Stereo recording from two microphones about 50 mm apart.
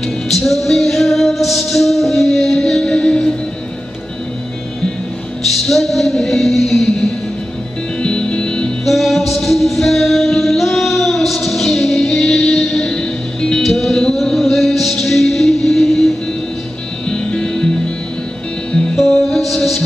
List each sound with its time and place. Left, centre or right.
0.3 s music: centre
5.6 s music: centre
8.0 s music: centre
8.8 s music: centre
13.6 s music: centre
17.1 s music: centre
18.9 s music: centre